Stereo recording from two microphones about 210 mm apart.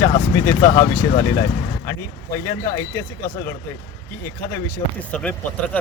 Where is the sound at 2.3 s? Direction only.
15° left (ahead or behind).